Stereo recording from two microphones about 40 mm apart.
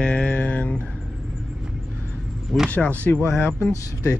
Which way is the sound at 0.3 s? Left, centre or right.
Left.